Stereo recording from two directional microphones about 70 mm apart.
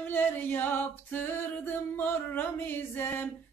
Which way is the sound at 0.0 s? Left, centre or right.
Left.